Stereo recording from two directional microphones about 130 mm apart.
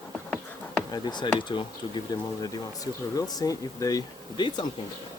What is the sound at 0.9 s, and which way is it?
Speech, 35° left (ahead or behind).